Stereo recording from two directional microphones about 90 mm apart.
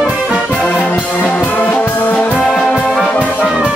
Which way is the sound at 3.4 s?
10° right (ahead or behind).